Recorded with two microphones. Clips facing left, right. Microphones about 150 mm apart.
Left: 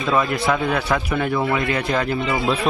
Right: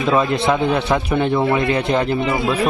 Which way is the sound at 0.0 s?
25° right (ahead or behind).